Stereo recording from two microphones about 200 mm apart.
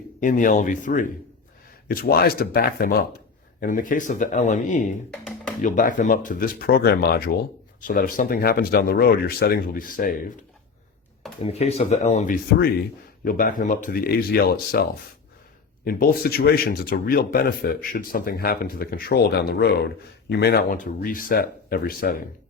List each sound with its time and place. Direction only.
0.2 s speech: 40° left (ahead or behind)
11.4 s speech: 30° left (ahead or behind)
12.5 s speech: 50° left (ahead or behind)